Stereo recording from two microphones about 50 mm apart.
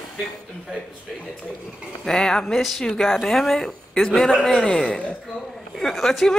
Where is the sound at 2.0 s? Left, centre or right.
Centre.